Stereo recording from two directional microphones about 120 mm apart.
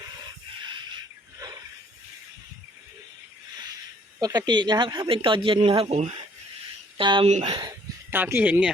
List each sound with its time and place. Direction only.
4.2 s speech: 35° right (ahead or behind); by 6.1 s 60° right (ahead or behind)
6.9 s speech: 45° right (ahead or behind)
7.3 s speech: 70° right (ahead or behind)
8.1 s speech: 15° right (ahead or behind)